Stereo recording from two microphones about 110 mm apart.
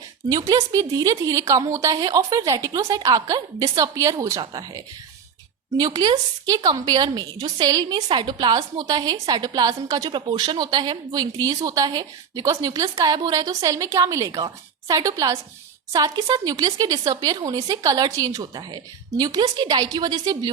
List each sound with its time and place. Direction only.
0.4 s a woman's voice: 30° right (ahead or behind)